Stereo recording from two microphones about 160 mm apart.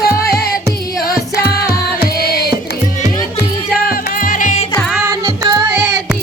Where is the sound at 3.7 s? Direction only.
60° left (ahead or behind).